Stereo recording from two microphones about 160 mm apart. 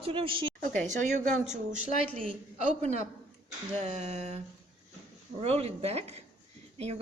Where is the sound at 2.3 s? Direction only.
45° right (ahead or behind).